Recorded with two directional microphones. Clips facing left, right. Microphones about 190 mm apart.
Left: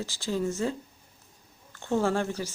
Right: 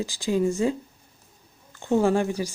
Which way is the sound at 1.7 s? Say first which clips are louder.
Right 5 dB; 15° right (ahead or behind).